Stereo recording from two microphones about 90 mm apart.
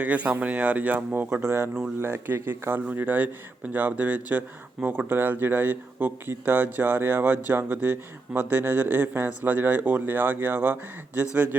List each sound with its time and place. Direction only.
0.0 s speech: 15° right (ahead or behind)